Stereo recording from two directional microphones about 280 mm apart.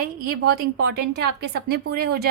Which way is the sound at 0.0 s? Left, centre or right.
Right.